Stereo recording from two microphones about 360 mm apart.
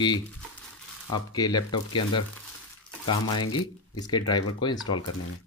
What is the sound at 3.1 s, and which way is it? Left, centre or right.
A man's voice, centre.